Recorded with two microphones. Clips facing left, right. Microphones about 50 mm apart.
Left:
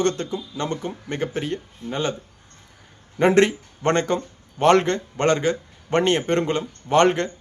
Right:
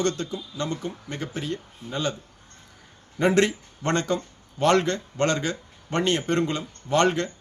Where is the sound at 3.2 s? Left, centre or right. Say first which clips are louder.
Left 4 dB; left.